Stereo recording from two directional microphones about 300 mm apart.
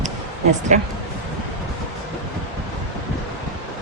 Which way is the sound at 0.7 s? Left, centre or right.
Right.